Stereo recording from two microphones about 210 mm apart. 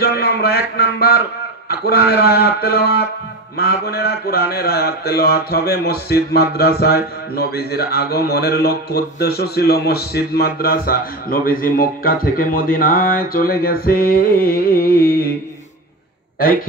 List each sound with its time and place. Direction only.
0.0 s a man's voice: 50° left (ahead or behind)